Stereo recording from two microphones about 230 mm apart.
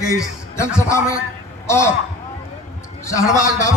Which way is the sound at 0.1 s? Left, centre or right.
Centre.